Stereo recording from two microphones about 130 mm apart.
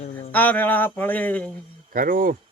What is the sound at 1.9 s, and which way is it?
Speech, 90° right.